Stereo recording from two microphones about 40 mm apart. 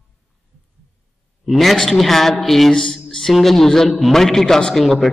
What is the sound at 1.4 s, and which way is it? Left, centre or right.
A man's voice, centre.